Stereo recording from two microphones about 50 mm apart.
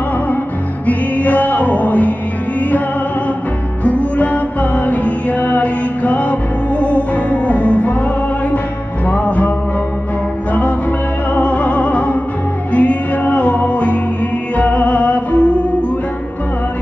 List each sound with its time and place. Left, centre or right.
0.8 s music: left
3.8 s music: left
11.3 s music: left